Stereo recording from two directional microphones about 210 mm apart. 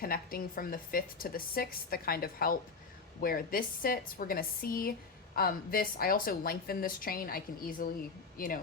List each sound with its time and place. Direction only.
0.0 s a woman's voice: 45° left (ahead or behind)